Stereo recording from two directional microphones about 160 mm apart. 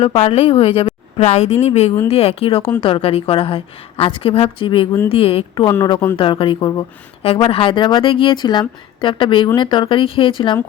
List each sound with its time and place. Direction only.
0.0 s speech: 35° left (ahead or behind)
5.6 s speech: 25° left (ahead or behind)